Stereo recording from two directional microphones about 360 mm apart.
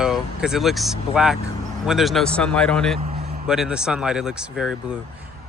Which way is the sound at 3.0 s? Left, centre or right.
Centre.